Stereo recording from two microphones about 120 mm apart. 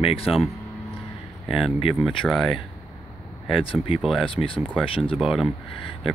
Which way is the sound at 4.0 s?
5° right (ahead or behind).